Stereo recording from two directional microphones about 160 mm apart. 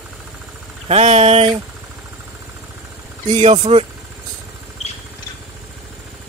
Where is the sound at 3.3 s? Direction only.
45° right (ahead or behind).